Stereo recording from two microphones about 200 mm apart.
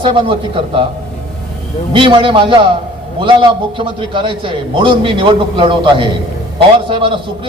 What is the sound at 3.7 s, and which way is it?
A man's voice, 25° right (ahead or behind).